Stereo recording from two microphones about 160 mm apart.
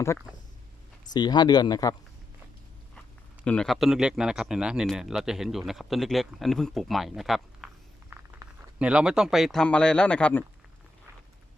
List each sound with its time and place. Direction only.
1.1 s speech: 25° left (ahead or behind)
3.4 s speech: 5° left (ahead or behind)